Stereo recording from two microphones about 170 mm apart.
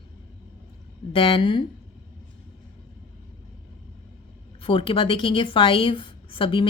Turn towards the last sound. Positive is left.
turn(degrees=30)  # may be behind; listen again after turning